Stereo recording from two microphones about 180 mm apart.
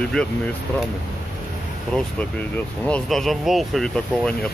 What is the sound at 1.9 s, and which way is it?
Speech, 5° left (ahead or behind).